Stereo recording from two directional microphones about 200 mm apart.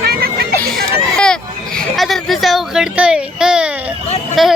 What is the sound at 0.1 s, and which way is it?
Music, 50° right (ahead or behind).